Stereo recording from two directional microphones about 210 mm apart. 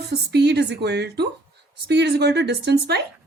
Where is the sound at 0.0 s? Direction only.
50° right (ahead or behind).